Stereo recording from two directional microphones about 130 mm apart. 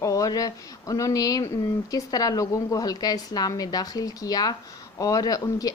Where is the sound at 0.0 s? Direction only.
25° left (ahead or behind).